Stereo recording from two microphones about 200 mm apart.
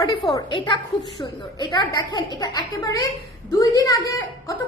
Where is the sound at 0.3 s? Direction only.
25° left (ahead or behind).